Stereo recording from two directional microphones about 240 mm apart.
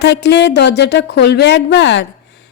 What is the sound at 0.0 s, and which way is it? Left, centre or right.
A woman's voice, left.